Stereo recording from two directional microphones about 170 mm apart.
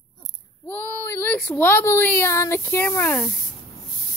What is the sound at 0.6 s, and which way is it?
Speech, 10° left (ahead or behind).